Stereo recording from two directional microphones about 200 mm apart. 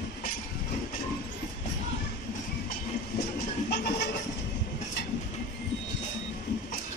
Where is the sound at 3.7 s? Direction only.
55° left (ahead or behind).